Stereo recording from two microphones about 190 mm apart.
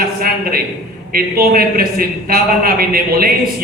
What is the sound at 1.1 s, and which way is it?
A man's voice, 50° right (ahead or behind).